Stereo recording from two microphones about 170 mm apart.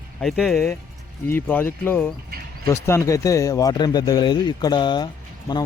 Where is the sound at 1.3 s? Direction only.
15° left (ahead or behind).